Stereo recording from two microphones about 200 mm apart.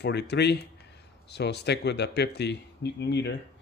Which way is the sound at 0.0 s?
55° left (ahead or behind).